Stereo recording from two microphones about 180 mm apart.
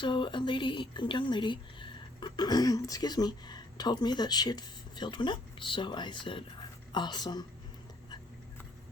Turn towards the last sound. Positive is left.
turn(degrees=25)  # may be behind; listen again after turning